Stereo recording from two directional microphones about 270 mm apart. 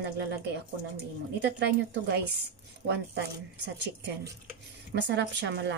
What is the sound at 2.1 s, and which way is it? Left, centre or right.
Speech, right.